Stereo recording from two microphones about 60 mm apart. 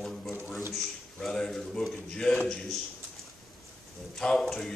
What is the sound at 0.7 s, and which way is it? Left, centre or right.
Mechanisms, centre.